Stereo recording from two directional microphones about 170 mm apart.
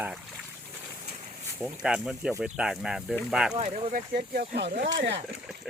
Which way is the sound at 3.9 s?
65° right (ahead or behind).